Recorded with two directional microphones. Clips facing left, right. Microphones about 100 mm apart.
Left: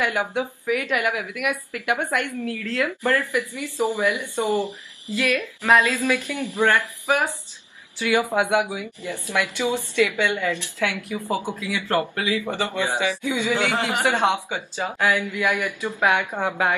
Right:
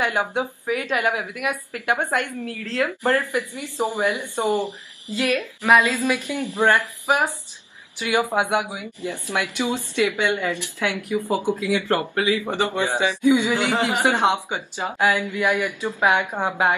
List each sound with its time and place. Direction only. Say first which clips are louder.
0.0 s speech: right 1 dB; 25° right (ahead or behind)